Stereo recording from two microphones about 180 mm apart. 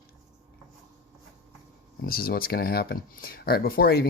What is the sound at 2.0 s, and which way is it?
Speech, 55° left (ahead or behind).